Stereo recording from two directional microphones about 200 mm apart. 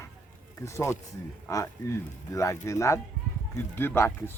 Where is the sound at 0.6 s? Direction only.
15° left (ahead or behind).